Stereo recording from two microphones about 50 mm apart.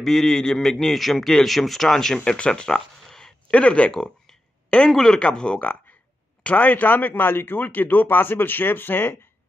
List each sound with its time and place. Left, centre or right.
0.0 s a man's voice: centre
2.3 s a sound: left
3.5 s speech: left
4.9 s speech: centre; by 9.1 s left